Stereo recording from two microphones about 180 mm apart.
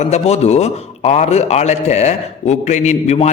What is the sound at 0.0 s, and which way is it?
A man's voice, 40° left (ahead or behind).